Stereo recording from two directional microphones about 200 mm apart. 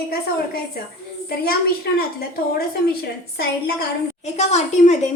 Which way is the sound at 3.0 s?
55° left (ahead or behind).